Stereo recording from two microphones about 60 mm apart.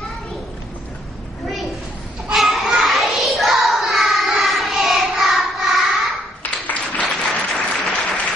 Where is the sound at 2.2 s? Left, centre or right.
Centre.